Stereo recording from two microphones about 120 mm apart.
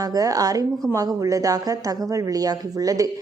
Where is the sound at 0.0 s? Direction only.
30° right (ahead or behind).